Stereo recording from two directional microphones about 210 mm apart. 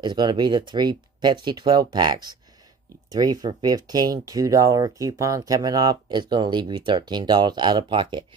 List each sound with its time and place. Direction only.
0.0 s speech: 20° right (ahead or behind)